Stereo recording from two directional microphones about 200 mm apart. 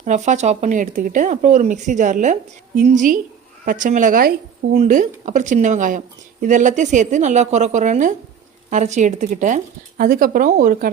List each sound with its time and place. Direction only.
0.0 s speech: 35° right (ahead or behind)